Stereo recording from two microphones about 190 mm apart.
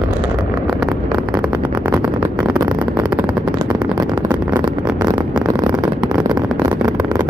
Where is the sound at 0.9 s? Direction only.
20° right (ahead or behind).